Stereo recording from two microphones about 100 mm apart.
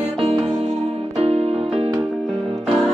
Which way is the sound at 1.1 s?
90° right.